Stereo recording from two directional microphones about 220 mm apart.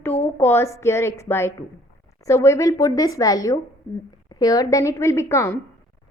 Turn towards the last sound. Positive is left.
turn(degrees=10)  # may be behind; listen again after turning